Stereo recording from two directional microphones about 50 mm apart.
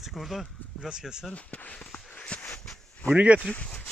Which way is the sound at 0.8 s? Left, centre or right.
Centre.